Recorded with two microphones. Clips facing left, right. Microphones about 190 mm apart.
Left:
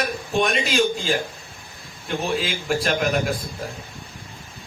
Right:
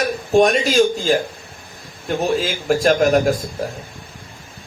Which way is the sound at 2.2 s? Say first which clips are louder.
Right 5 dB; 45° right (ahead or behind).